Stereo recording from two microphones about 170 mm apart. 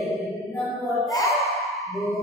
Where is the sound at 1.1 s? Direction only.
20° left (ahead or behind).